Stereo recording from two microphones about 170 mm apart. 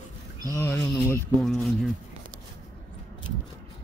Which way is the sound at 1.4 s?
Centre (ahead or behind).